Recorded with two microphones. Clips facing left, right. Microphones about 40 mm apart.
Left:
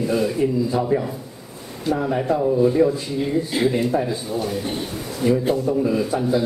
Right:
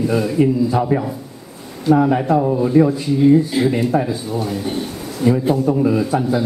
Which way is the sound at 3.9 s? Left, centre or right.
Right.